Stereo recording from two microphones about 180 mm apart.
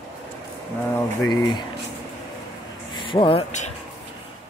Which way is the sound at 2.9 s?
25° left (ahead or behind).